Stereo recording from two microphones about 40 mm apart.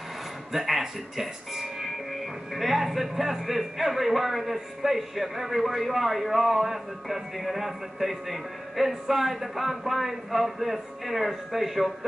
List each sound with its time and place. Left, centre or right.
0.5 s speech: centre